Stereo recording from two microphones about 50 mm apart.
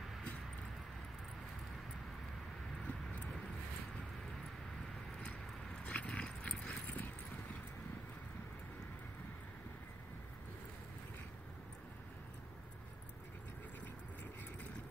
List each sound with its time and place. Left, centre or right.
2.8 s vehicle: left
5.9 s clip-clop: left